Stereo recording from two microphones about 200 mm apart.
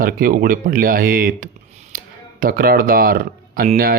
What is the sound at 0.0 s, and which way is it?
Speech, 45° right (ahead or behind).